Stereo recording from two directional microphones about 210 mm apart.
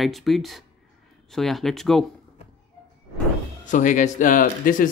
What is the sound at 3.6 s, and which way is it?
Speech, 35° left (ahead or behind).